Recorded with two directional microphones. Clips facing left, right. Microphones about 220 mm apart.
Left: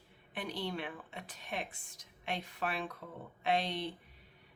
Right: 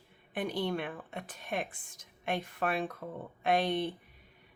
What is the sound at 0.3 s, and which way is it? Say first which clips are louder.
Speech: right 6 dB; 50° right (ahead or behind).